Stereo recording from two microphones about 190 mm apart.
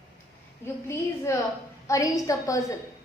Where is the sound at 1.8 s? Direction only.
15° left (ahead or behind).